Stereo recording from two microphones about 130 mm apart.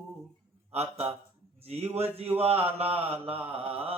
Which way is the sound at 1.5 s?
50° right (ahead or behind).